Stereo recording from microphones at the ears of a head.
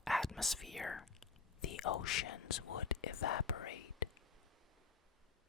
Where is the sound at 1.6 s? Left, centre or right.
Left.